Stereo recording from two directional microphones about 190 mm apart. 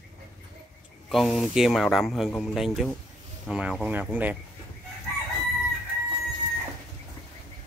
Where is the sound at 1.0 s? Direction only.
Centre (ahead or behind).